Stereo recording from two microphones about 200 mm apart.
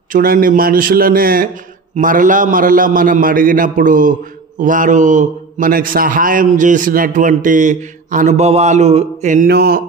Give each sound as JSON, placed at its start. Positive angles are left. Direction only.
{"t": 0.1, "sound": "a man's voice", "side_deg": -45}